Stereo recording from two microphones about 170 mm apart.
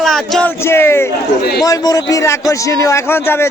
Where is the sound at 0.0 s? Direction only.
5° left (ahead or behind).